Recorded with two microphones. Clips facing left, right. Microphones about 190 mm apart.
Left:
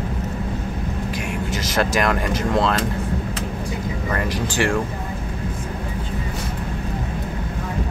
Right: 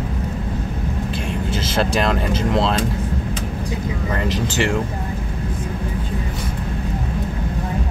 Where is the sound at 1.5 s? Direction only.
25° right (ahead or behind).